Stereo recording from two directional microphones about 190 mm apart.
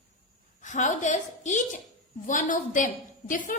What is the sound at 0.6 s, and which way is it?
A woman's voice, 40° left (ahead or behind).